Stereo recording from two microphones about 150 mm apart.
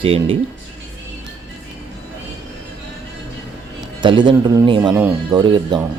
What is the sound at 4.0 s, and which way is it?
Speech, 30° right (ahead or behind).